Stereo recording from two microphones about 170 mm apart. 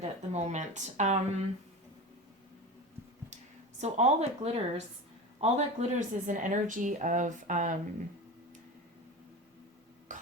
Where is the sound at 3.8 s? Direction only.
40° right (ahead or behind).